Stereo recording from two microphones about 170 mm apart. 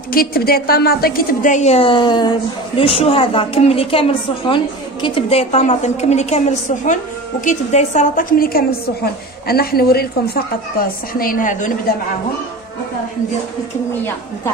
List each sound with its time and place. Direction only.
0.1 s a woman's voice: 60° left (ahead or behind)